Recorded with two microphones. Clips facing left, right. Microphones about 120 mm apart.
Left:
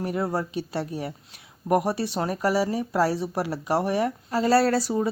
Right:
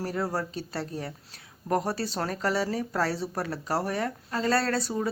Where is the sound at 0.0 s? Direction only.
20° left (ahead or behind).